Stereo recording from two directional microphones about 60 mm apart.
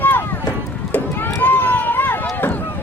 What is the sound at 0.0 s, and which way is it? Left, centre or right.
Run, left.